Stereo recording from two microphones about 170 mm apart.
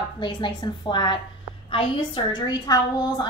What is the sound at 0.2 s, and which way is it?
A woman's voice, 25° left (ahead or behind).